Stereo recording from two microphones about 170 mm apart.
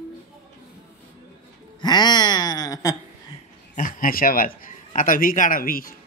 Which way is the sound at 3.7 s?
55° left (ahead or behind).